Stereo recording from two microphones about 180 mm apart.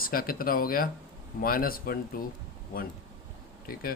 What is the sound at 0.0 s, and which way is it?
Speech, 55° left (ahead or behind).